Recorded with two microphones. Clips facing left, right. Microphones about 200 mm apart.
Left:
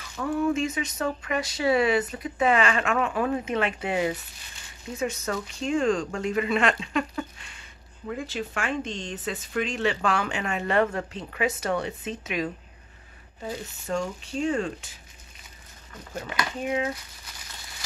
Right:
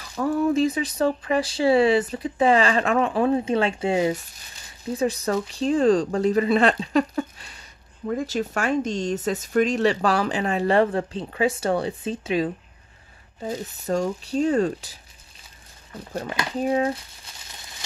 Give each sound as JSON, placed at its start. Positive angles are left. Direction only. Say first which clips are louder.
{"t": 0.1, "sound": "speech", "louder": "right 4 dB", "side_deg": -35}
{"t": 13.8, "sound": "speech", "louder": "right 5 dB", "side_deg": -40}
{"t": 17.3, "sound": "a sound", "louder": "even", "side_deg": -25}